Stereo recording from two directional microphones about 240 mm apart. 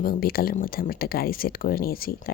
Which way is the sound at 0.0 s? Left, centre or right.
Left.